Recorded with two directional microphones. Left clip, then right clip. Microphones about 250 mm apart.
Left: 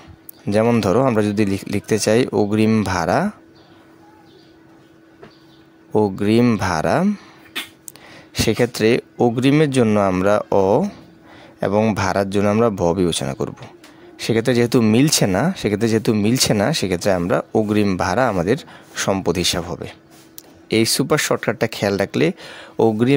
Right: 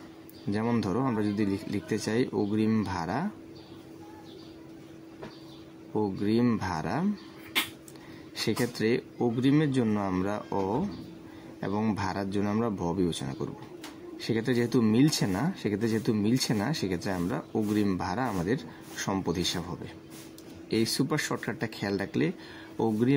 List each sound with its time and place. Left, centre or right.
0.5 s speech: left
5.9 s speech: left
8.4 s speech: left